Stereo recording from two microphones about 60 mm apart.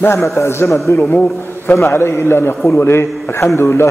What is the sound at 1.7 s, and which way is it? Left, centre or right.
A man's voice, left.